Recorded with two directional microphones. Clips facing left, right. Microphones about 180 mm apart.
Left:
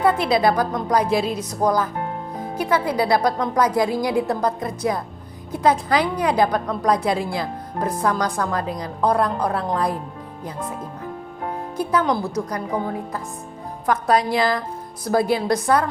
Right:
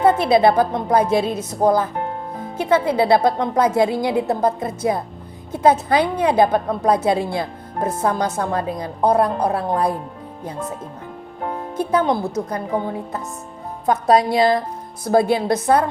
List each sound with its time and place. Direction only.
0.0 s a woman's voice: 25° right (ahead or behind)
11.9 s a woman's voice: 25° right (ahead or behind)